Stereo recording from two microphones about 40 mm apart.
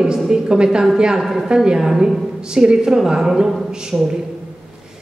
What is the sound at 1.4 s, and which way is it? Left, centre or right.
A woman's voice, centre.